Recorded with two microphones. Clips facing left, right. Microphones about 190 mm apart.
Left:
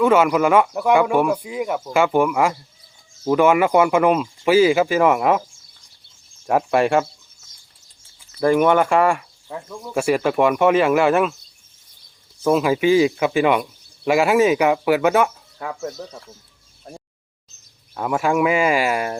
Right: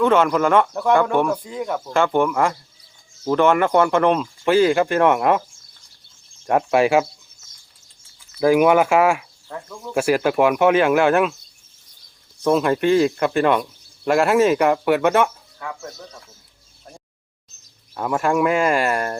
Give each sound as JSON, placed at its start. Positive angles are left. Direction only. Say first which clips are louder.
{"t": 0.0, "sound": "speech", "louder": "left 1 dB", "side_deg": 5}
{"t": 6.4, "sound": "speech", "louder": "right 1 dB", "side_deg": 0}
{"t": 8.4, "sound": "speech", "louder": "right 1 dB", "side_deg": -5}
{"t": 12.4, "sound": "speech", "louder": "even", "side_deg": 5}
{"t": 15.5, "sound": "speech", "louder": "left 5 dB", "side_deg": 25}
{"t": 17.9, "sound": "speech", "louder": "even", "side_deg": 0}